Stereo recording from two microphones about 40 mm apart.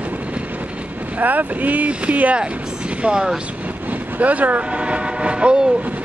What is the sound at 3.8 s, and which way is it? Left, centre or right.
Vehicle, right.